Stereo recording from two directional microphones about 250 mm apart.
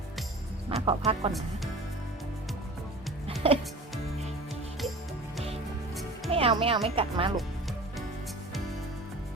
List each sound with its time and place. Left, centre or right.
0.7 s speech: right
1.3 s speech: centre
3.4 s music: right
5.9 s music: centre
6.3 s speech: right